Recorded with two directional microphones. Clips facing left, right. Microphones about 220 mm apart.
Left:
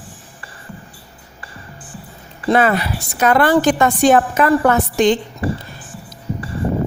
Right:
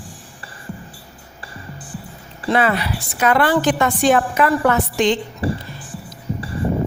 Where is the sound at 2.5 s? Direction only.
45° left (ahead or behind).